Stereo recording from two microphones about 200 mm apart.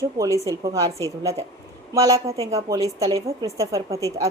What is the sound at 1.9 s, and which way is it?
Speech, 15° right (ahead or behind).